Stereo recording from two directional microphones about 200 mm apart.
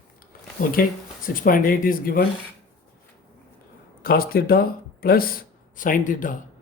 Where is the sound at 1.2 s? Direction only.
45° left (ahead or behind).